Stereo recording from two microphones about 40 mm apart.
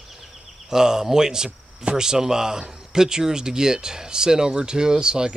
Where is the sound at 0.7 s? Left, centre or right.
Centre.